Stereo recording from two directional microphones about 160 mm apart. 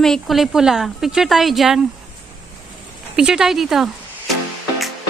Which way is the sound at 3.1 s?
5° right (ahead or behind).